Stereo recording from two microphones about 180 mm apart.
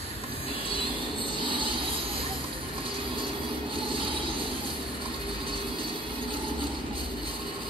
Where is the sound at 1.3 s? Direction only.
25° right (ahead or behind).